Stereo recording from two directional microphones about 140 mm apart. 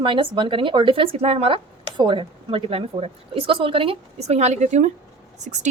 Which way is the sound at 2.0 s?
35° right (ahead or behind).